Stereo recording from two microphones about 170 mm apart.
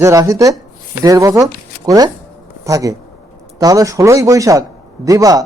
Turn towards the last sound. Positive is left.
turn(degrees=-20)  # may be behind; listen again after turning